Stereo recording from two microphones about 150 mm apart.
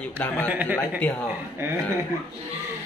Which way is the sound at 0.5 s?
10° right (ahead or behind).